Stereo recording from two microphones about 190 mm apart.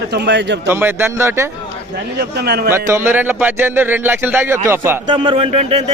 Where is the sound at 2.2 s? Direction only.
55° right (ahead or behind).